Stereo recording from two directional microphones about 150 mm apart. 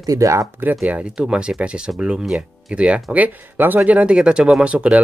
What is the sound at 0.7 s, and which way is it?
Speech, 5° right (ahead or behind).